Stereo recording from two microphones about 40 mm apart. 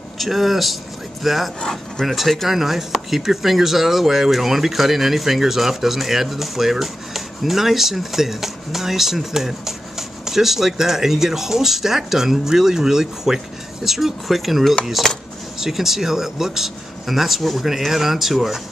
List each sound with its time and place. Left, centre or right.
0.2 s speech: centre
1.6 s speech: centre
2.0 s speech: centre
15.0 s speech: centre
15.6 s speech: centre